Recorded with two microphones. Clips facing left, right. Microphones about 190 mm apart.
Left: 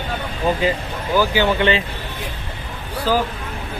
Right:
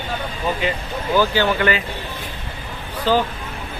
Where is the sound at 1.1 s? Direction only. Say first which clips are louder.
Left 1 dB; 10° left (ahead or behind).